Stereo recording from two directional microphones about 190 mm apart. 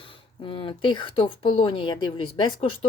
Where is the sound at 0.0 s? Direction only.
25° left (ahead or behind).